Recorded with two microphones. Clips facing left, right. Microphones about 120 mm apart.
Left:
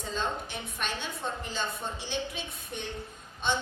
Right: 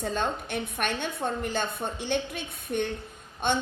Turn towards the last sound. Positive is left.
turn(degrees=-55)  # may be behind; listen again after turning